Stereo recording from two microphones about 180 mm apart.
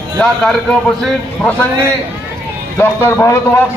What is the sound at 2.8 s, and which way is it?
Speech, 10° left (ahead or behind).